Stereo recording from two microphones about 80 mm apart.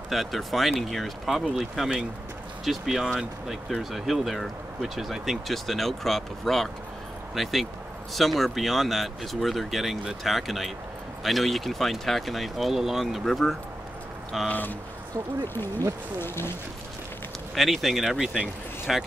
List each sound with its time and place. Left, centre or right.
0.1 s speech: centre
14.5 s speech: left
17.6 s speech: centre